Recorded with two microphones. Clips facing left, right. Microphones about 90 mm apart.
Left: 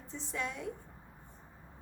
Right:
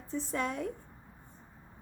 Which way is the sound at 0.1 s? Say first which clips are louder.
Right 6 dB; 50° right (ahead or behind).